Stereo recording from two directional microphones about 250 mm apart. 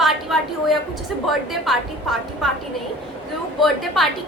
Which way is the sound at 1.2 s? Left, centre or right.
Centre.